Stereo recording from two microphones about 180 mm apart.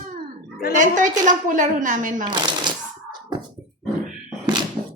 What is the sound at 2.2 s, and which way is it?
Shuffling cards, 25° right (ahead or behind).